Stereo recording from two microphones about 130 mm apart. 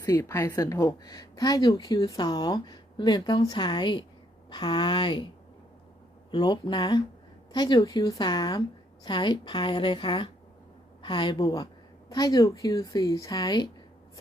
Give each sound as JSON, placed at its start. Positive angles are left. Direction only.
{"t": 0.0, "sound": "speech", "side_deg": 25}
{"t": 6.3, "sound": "a woman's voice", "side_deg": 35}